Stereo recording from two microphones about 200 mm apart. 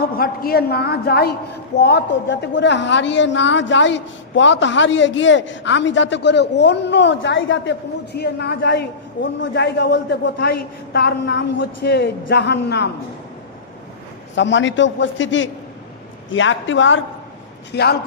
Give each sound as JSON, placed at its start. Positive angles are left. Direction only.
{"t": 0.0, "sound": "a man's voice", "side_deg": 50}
{"t": 14.3, "sound": "a man's voice", "side_deg": 65}
{"t": 17.7, "sound": "a woman's voice", "side_deg": 55}